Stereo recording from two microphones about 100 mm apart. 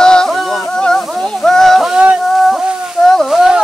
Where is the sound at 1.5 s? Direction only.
5° left (ahead or behind).